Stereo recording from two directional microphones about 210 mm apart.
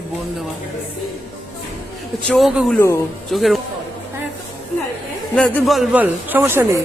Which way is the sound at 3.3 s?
Centre (ahead or behind).